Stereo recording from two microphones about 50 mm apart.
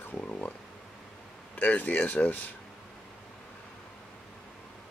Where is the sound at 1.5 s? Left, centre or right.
Left.